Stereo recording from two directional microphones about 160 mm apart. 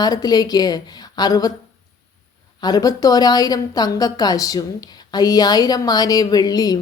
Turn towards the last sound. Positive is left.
turn(degrees=25)  # may be behind; listen again after turning